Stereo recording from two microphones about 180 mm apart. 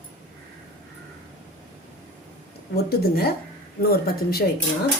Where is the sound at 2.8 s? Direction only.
60° left (ahead or behind).